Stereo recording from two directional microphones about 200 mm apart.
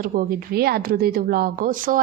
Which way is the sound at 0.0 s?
45° right (ahead or behind).